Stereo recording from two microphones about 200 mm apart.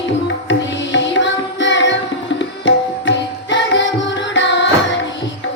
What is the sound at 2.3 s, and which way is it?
Tabla, 65° left (ahead or behind).